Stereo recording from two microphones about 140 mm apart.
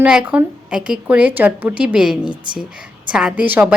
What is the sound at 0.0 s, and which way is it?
A woman's voice, 5° right (ahead or behind).